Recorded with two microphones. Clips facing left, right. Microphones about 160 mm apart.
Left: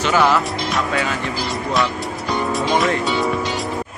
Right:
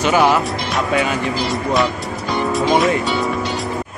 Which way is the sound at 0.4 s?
Centre (ahead or behind).